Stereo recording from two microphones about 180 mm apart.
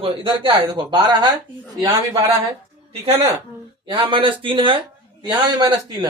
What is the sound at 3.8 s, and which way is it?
Speech, 30° right (ahead or behind).